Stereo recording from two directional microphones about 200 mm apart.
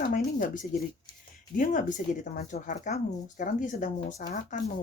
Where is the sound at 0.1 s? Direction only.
40° left (ahead or behind).